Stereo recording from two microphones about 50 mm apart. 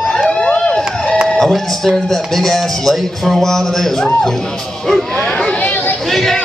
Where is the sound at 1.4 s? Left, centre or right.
Centre.